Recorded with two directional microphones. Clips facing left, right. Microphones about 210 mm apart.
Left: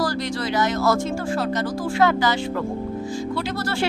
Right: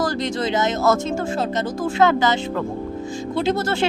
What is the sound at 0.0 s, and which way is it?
Speech, 20° right (ahead or behind).